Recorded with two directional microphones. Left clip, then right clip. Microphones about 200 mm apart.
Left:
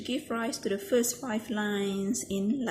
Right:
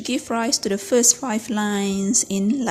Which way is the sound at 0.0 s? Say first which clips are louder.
Right 9 dB; 45° right (ahead or behind).